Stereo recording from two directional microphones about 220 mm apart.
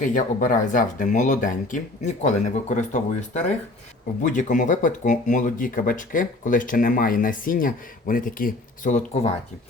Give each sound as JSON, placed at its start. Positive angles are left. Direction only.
{"t": 0.0, "sound": "speech", "side_deg": 35}